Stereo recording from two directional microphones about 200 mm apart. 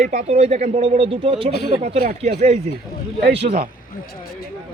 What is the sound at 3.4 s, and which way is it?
Speech, 35° right (ahead or behind).